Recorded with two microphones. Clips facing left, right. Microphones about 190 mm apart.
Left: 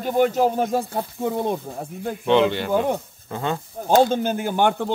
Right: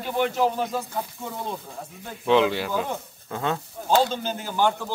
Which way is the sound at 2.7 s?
50° left (ahead or behind).